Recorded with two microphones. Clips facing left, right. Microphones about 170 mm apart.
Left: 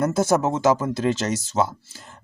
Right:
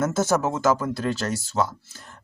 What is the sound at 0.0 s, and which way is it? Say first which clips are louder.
Speech: left 2 dB; 15° left (ahead or behind).